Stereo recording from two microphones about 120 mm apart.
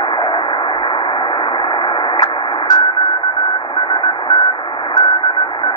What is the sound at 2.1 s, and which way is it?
Sidetone, 30° left (ahead or behind).